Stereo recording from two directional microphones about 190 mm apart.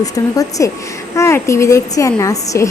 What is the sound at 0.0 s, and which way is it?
A woman's voice, 20° left (ahead or behind).